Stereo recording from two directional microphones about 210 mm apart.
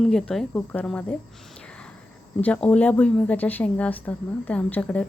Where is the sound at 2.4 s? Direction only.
5° left (ahead or behind).